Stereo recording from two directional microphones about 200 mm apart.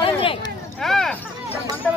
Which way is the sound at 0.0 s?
25° left (ahead or behind).